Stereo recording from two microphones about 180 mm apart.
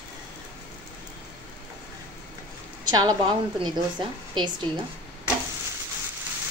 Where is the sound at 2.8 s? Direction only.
20° right (ahead or behind).